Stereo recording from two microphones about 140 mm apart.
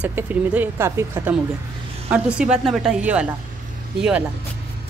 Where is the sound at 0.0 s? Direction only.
10° right (ahead or behind).